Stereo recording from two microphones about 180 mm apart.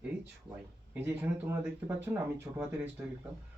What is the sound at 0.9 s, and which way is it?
Speech, 10° right (ahead or behind).